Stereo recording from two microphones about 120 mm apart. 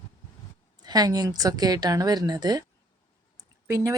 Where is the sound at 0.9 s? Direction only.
30° right (ahead or behind).